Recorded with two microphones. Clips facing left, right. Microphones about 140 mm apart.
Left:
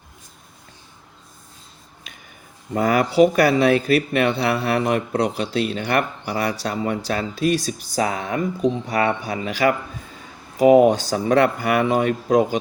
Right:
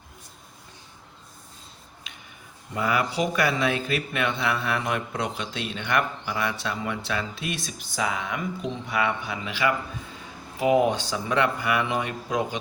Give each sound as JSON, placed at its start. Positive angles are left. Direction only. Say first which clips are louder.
{"t": 2.7, "sound": "speech", "louder": "left 9 dB", "side_deg": 40}